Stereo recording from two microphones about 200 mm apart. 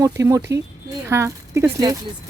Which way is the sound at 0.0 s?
15° right (ahead or behind).